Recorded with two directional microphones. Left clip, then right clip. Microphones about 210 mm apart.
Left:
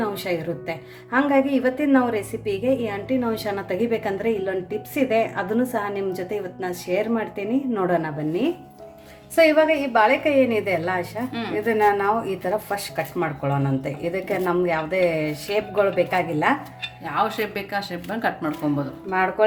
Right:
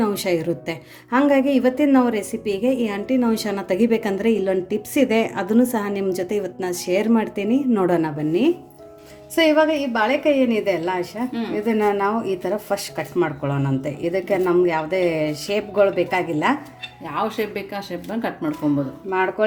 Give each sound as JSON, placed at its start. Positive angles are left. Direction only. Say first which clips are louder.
{"t": 0.0, "sound": "a woman's voice", "louder": "right 4 dB", "side_deg": -50}
{"t": 11.3, "sound": "speech", "louder": "right 1 dB", "side_deg": 0}
{"t": 11.6, "sound": "speech", "louder": "left 1 dB", "side_deg": -35}
{"t": 17.1, "sound": "speech", "louder": "left 1 dB", "side_deg": 0}